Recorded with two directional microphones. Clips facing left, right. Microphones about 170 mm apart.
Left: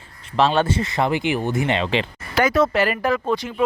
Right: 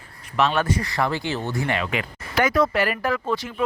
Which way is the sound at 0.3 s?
30° left (ahead or behind).